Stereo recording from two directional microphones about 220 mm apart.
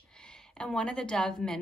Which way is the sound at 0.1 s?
5° left (ahead or behind).